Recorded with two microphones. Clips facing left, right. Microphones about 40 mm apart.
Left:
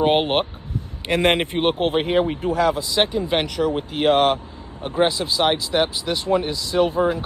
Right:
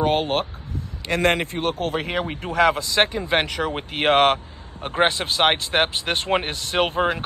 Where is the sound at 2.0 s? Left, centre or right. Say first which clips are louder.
Left 6 dB; right.